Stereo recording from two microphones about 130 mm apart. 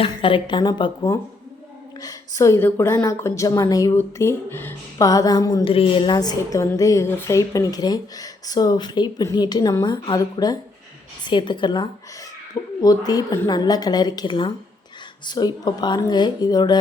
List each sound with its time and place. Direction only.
0.0 s a woman's voice: 45° left (ahead or behind)
5.6 s a woman's voice: 45° left (ahead or behind)